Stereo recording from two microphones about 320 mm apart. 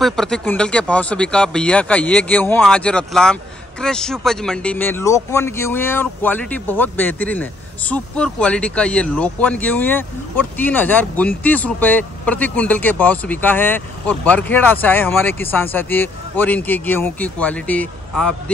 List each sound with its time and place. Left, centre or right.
0.0 s speech: centre